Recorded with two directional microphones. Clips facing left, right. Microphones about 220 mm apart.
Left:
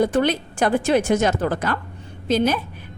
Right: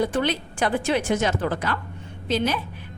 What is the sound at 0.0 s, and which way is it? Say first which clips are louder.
A woman's voice: left 4 dB; 45° left (ahead or behind).